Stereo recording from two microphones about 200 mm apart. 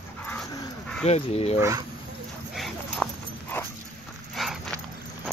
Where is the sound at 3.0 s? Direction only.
10° left (ahead or behind).